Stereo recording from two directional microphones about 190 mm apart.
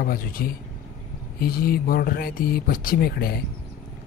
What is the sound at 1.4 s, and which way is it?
Speech, 50° left (ahead or behind).